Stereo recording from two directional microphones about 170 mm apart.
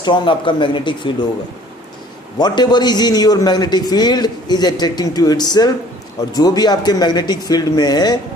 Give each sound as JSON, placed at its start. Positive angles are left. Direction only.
{"t": 0.0, "sound": "a man's voice", "side_deg": 30}
{"t": 2.4, "sound": "a man's voice", "side_deg": 25}